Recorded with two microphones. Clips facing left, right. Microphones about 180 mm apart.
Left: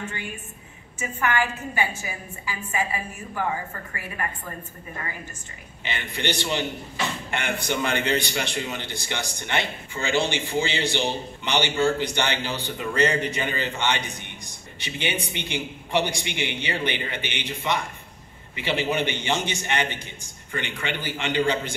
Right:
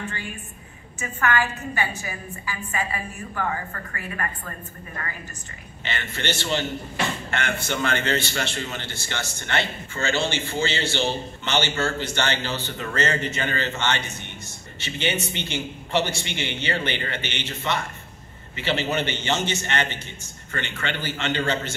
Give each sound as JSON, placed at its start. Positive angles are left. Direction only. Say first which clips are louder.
{"t": 0.9, "sound": "a woman's voice", "louder": "right 1 dB", "side_deg": 25}
{"t": 2.7, "sound": "a man's voice", "louder": "left 2 dB", "side_deg": 15}